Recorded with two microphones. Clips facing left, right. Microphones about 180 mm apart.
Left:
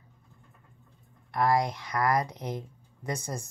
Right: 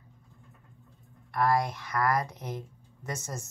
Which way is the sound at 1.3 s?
15° left (ahead or behind).